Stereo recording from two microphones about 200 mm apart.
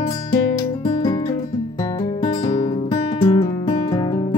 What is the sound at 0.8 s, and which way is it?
Music, 25° left (ahead or behind).